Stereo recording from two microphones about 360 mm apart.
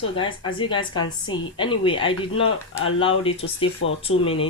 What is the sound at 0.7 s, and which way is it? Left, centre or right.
A woman's voice, centre.